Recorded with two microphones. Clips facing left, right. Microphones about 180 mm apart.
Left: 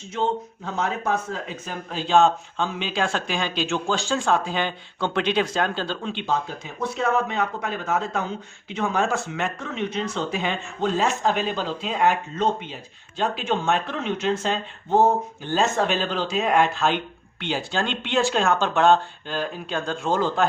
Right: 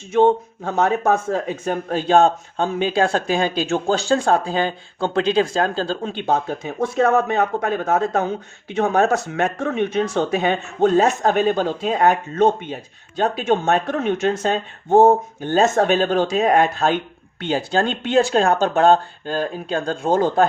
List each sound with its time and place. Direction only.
0.2 s speech: 60° right (ahead or behind); by 6.1 s 40° right (ahead or behind)
6.2 s speech: 60° right (ahead or behind); by 18.9 s 35° right (ahead or behind)
20.1 s speech: 50° right (ahead or behind)